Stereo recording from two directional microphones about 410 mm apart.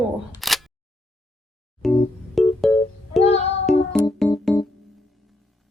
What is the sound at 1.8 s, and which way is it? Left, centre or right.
Music, centre.